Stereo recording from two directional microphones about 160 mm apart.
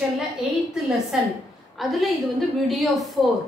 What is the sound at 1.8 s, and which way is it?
A woman's voice, centre (ahead or behind).